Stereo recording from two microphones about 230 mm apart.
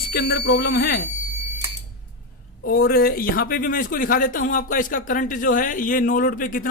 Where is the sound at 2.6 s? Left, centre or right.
Left.